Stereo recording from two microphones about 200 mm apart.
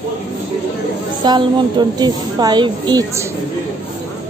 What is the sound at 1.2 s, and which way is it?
A woman's voice, 20° right (ahead or behind).